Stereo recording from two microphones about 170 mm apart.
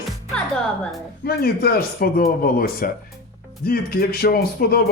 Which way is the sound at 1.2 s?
65° left (ahead or behind).